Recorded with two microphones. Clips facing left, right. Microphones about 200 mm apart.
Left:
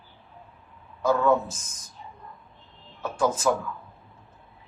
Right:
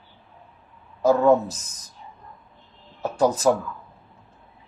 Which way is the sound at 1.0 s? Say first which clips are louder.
Right 5 dB; 35° right (ahead or behind).